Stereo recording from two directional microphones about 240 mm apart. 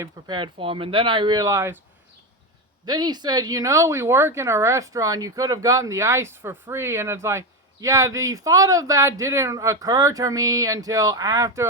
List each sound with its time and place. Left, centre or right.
0.0 s speech: centre
2.8 s speech: centre